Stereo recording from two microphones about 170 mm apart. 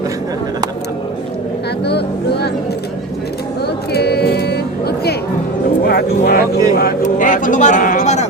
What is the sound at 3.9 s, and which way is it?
Music, 70° left (ahead or behind).